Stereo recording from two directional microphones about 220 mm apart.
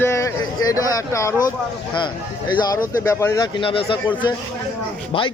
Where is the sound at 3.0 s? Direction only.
10° left (ahead or behind).